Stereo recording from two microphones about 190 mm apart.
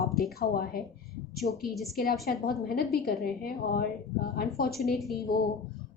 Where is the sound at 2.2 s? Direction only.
55° left (ahead or behind).